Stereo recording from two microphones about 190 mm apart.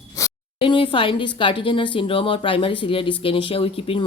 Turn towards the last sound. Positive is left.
turn(degrees=30)  # may be behind; listen again after turning